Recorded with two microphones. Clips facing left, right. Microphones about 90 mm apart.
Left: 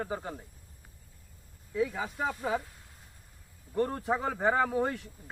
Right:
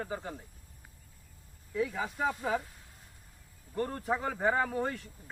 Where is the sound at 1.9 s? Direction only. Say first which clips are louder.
Right 1 dB; 15° left (ahead or behind).